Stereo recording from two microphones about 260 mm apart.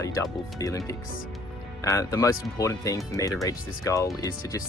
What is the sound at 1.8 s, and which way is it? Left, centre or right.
Speech, centre.